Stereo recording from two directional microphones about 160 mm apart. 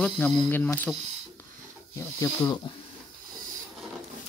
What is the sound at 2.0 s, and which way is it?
Speech, 20° left (ahead or behind).